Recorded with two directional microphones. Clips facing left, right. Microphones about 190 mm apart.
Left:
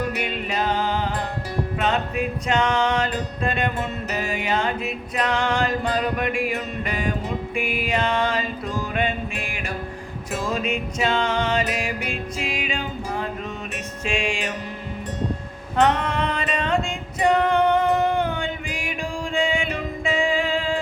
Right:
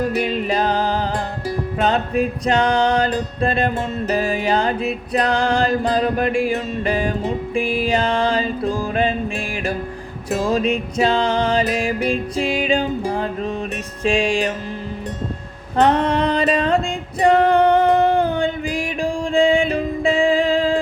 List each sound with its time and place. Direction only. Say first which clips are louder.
0.0 s music: right 6 dB; 35° right (ahead or behind)
15.8 s female singing: right 4 dB; 35° right (ahead or behind)